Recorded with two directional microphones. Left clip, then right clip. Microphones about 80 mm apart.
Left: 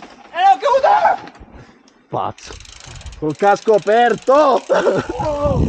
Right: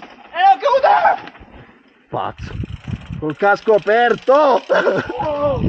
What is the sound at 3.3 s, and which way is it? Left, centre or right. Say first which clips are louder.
Speech: even; left.